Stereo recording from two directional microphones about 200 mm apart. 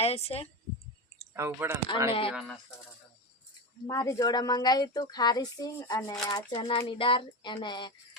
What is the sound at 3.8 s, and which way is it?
Speech, 15° left (ahead or behind).